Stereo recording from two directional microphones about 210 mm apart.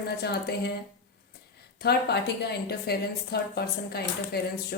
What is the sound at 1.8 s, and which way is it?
A woman's voice, 50° left (ahead or behind).